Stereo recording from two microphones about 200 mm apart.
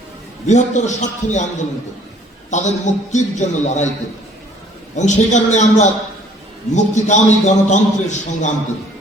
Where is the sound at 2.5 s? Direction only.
35° left (ahead or behind).